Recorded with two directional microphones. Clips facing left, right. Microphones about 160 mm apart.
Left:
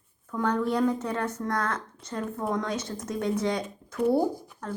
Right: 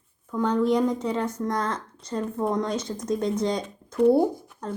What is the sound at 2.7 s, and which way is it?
Speech, 10° left (ahead or behind).